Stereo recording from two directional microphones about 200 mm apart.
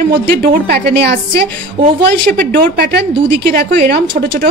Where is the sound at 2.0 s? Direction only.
45° right (ahead or behind).